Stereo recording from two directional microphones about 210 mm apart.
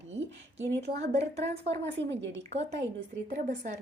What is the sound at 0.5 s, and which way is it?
Speech, 55° right (ahead or behind).